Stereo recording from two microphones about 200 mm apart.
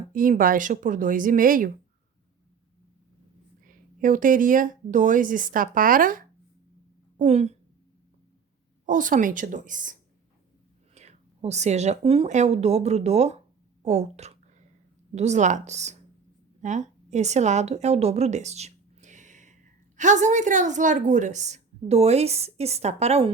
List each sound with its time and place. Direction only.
0.1 s speech: 45° right (ahead or behind)
3.7 s speech: 40° right (ahead or behind)
7.2 s a woman's voice: 35° right (ahead or behind)
8.9 s a woman's voice: 40° right (ahead or behind)